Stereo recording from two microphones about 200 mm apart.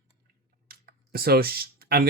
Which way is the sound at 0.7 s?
50° right (ahead or behind).